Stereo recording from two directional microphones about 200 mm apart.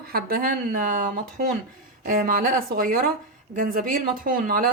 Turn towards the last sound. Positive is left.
turn(degrees=-45)  # may be behind; listen again after turning